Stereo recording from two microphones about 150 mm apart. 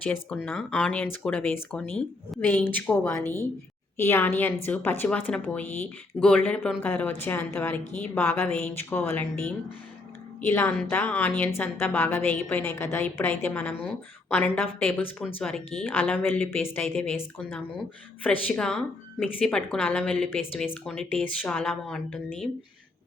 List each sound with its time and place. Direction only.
0.3 s a woman's voice: 10° left (ahead or behind)
16.8 s speech: 5° left (ahead or behind)
18.2 s a woman's voice: 10° left (ahead or behind)